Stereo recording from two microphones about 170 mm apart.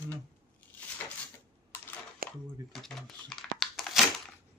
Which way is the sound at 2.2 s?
60° right (ahead or behind).